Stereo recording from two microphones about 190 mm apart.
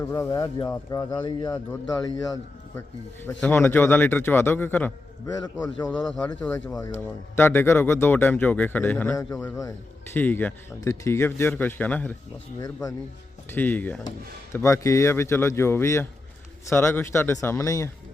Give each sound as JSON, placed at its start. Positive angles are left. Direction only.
{"t": 0.0, "sound": "a man's voice", "side_deg": 15}
{"t": 3.4, "sound": "a man's voice", "side_deg": 10}
{"t": 5.9, "sound": "a man's voice", "side_deg": 5}
{"t": 12.5, "sound": "a man's voice", "side_deg": 20}